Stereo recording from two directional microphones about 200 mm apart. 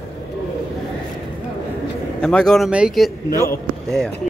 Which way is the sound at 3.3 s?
15° left (ahead or behind).